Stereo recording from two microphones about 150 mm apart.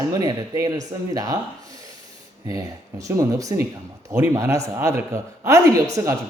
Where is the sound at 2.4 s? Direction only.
25° right (ahead or behind).